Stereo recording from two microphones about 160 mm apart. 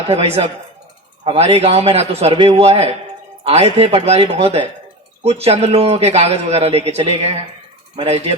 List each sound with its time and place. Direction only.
0.1 s a man's voice: 40° right (ahead or behind)